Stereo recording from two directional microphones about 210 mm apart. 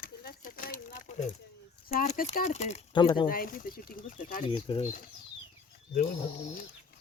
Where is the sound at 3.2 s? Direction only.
40° left (ahead or behind).